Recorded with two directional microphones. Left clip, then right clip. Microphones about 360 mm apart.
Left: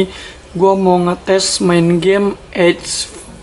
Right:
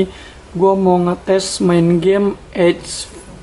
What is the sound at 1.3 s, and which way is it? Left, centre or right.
Speech, centre.